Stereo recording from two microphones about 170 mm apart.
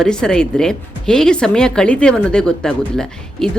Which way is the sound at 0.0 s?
5° left (ahead or behind).